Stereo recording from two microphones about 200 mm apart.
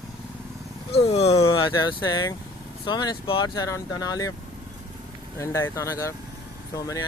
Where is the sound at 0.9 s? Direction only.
30° left (ahead or behind).